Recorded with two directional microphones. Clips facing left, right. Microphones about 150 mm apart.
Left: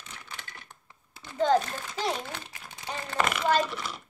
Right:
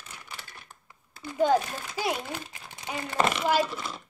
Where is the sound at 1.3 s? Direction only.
10° right (ahead or behind).